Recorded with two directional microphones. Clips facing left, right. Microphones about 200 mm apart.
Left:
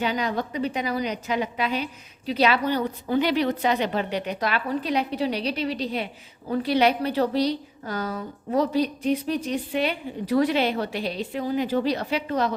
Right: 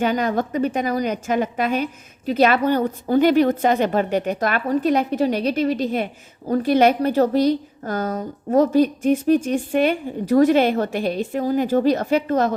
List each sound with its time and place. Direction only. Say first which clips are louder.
0.0 s a woman's voice: right 6 dB; 50° right (ahead or behind)